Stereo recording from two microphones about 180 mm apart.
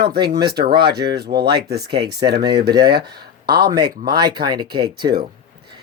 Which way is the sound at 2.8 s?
60° right (ahead or behind).